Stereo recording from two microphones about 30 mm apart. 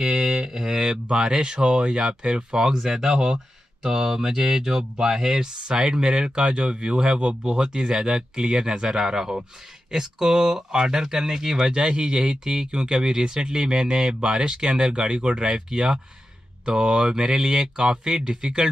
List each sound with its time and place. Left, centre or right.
0.0 s mantra: centre
1.1 s speech: right
2.7 s speech: centre